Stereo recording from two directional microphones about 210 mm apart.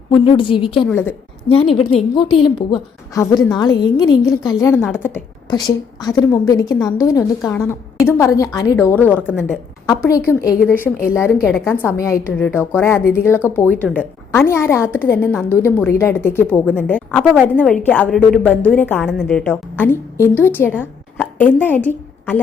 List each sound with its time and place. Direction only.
0.1 s a woman's voice: 25° left (ahead or behind)
0.9 s a woman's voice: 10° left (ahead or behind)
1.5 s a woman's voice: 25° left (ahead or behind); by 17.2 s 5° left (ahead or behind)
17.3 s a woman's voice: 10° right (ahead or behind)
17.7 s a woman's voice: 5° left (ahead or behind)